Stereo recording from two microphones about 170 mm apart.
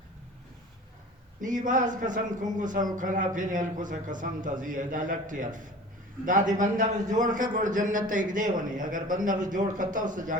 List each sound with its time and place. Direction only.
1.4 s a man's voice: 50° right (ahead or behind)